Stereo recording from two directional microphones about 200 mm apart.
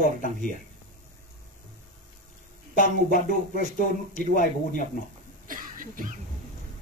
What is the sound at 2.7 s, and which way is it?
Speech, 40° left (ahead or behind).